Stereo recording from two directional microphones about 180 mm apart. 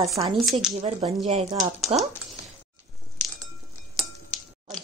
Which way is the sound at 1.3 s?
35° right (ahead or behind).